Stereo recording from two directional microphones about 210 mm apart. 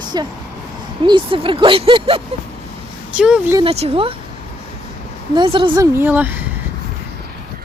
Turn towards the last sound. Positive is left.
turn(degrees=-10)  # may be behind; listen again after turning